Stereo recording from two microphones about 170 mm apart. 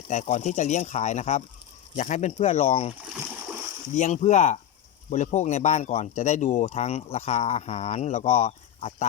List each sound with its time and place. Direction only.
0.1 s speech: 45° left (ahead or behind)
3.9 s speech: 45° left (ahead or behind)